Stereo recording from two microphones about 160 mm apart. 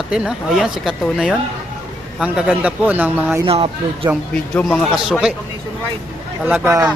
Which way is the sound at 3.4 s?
35° right (ahead or behind).